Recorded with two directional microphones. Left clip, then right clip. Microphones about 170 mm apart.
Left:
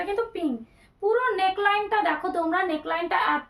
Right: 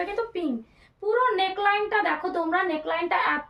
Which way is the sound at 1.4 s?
20° left (ahead or behind).